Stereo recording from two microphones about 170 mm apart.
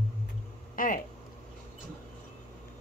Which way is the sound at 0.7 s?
55° left (ahead or behind).